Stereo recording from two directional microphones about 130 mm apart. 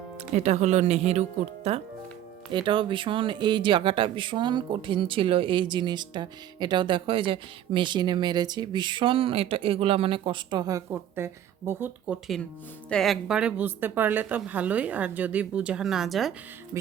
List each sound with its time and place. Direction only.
0.3 s speech: 60° right (ahead or behind)
2.5 s speech: 40° right (ahead or behind); by 12.2 s 10° right (ahead or behind)
12.9 s speech: centre (ahead or behind)